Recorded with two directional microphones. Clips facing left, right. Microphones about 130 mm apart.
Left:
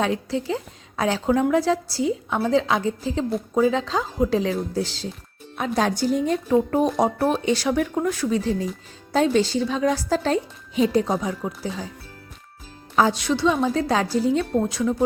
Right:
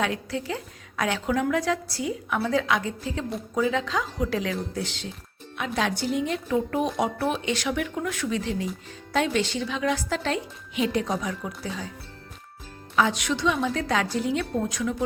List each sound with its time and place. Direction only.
0.0 s a woman's voice: 30° left (ahead or behind)
13.0 s a woman's voice: 35° left (ahead or behind)